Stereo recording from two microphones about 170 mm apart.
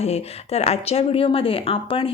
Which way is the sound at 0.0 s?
40° left (ahead or behind).